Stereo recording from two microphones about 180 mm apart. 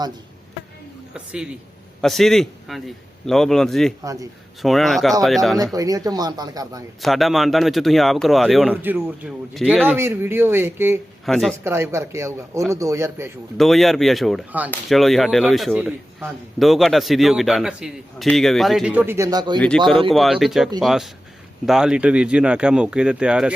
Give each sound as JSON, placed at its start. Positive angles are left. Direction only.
{"t": 1.1, "sound": "a man's voice", "side_deg": -5}
{"t": 4.0, "sound": "speech", "side_deg": -20}
{"t": 4.6, "sound": "a man's voice", "side_deg": 0}
{"t": 5.7, "sound": "speech", "side_deg": -20}
{"t": 7.0, "sound": "a man's voice", "side_deg": 0}
{"t": 8.7, "sound": "speech", "side_deg": -10}
{"t": 9.6, "sound": "a man's voice", "side_deg": 0}
{"t": 9.9, "sound": "speech", "side_deg": -10}
{"t": 11.3, "sound": "a man's voice", "side_deg": 0}
{"t": 11.6, "sound": "speech", "side_deg": -15}
{"t": 13.6, "sound": "a man's voice", "side_deg": 0}
{"t": 19.5, "sound": "a man's voice", "side_deg": 5}